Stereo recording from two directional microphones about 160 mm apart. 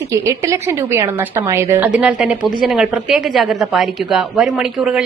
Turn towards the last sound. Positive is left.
turn(degrees=-5)  # may be behind; listen again after turning